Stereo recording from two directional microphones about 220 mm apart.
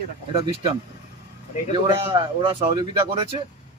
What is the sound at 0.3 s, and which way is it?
Speech, 25° right (ahead or behind).